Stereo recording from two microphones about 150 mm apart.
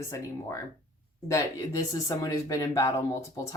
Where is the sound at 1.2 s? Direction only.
20° left (ahead or behind).